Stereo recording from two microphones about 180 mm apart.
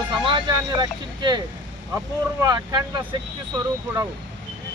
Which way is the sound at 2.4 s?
20° right (ahead or behind).